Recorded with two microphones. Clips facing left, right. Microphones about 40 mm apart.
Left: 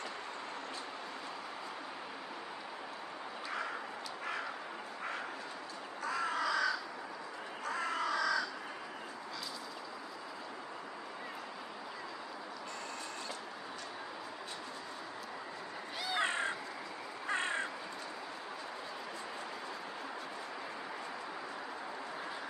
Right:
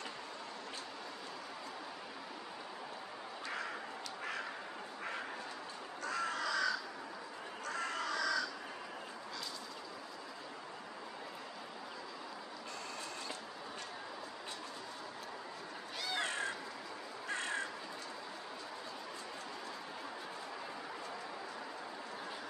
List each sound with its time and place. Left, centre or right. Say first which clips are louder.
6.0 s crow: left 3 dB; centre
16.0 s cat: left 4 dB; centre
16.3 s cat: left 3 dB; left
17.3 s crow: left 4 dB; left